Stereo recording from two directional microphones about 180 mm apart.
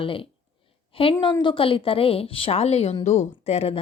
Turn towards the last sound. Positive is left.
turn(degrees=35)  # may be behind; listen again after turning